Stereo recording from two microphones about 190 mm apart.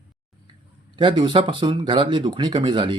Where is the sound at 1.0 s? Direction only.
25° right (ahead or behind).